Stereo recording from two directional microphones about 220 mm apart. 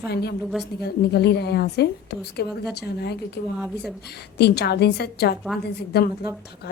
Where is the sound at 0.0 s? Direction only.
50° left (ahead or behind).